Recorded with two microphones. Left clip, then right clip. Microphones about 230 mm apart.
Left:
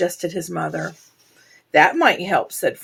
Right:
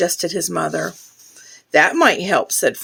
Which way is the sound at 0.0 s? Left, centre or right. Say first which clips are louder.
Right 3 dB; right.